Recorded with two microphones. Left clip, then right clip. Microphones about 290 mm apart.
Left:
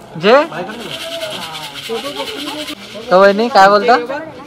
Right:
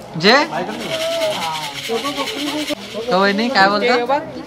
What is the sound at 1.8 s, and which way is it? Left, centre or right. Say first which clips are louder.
Speech: even; right.